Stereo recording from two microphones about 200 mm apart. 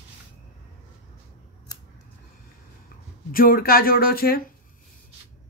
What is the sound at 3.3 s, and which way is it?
Speech, 45° left (ahead or behind).